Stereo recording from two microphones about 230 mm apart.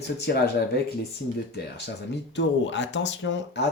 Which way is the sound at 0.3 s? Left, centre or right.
Left.